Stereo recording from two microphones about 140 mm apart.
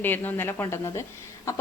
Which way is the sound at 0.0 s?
15° left (ahead or behind).